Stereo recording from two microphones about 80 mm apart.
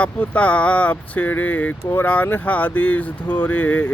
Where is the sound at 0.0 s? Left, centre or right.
Centre.